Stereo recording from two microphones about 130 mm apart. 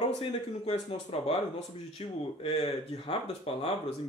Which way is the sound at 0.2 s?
45° left (ahead or behind).